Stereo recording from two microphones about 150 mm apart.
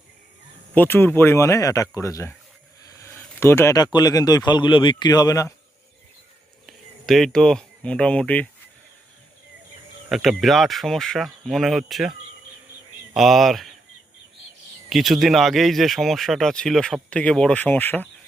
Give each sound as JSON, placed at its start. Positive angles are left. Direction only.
{"t": 0.7, "sound": "speech", "side_deg": 15}
{"t": 3.0, "sound": "a sound", "side_deg": 15}
{"t": 3.9, "sound": "speech", "side_deg": 25}
{"t": 6.7, "sound": "speech", "side_deg": 0}
{"t": 10.1, "sound": "speech", "side_deg": 0}
{"t": 13.1, "sound": "speech", "side_deg": 0}
{"t": 14.8, "sound": "speech", "side_deg": 0}